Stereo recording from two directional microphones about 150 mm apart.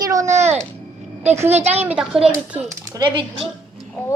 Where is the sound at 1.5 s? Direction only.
45° right (ahead or behind).